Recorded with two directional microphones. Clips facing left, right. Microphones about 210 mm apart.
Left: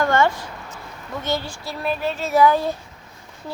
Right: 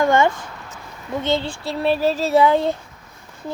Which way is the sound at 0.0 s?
15° right (ahead or behind).